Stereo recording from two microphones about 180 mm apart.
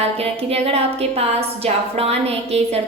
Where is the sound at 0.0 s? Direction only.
35° right (ahead or behind).